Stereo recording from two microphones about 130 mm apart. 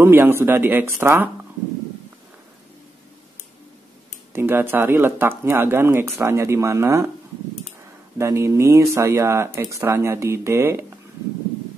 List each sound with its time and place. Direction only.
0.0 s speech: 15° right (ahead or behind)
4.3 s speech: 20° right (ahead or behind)
8.2 s speech: 20° right (ahead or behind)